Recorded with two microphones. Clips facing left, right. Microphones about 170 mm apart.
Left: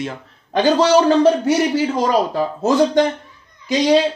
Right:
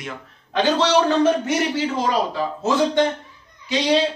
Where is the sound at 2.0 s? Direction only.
45° left (ahead or behind).